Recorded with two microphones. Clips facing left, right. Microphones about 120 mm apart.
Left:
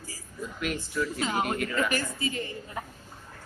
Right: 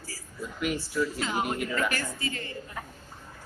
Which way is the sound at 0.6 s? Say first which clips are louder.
Right 2 dB; 10° right (ahead or behind).